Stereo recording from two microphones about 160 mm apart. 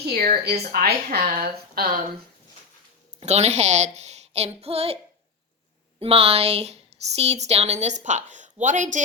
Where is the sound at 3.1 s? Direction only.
45° right (ahead or behind).